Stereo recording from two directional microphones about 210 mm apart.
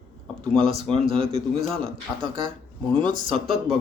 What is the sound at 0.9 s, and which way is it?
Speech, 25° right (ahead or behind).